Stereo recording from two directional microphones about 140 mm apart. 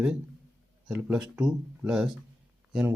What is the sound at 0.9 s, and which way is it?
Speech, 5° right (ahead or behind).